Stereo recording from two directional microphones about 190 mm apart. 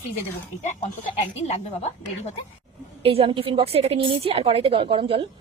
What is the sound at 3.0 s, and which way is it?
A woman's voice, 30° right (ahead or behind).